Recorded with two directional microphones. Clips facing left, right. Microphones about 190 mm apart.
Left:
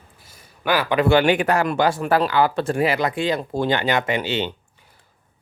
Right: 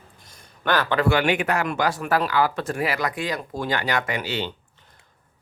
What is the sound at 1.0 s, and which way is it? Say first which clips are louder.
Speech: left 4 dB; 30° left (ahead or behind).